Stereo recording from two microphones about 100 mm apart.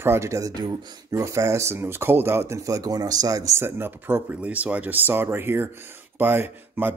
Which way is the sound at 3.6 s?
25° right (ahead or behind).